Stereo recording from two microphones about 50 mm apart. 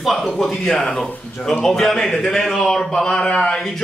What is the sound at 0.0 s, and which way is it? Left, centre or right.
A man's voice, centre.